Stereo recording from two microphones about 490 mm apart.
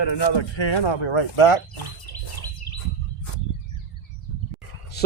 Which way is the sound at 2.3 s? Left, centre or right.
Left.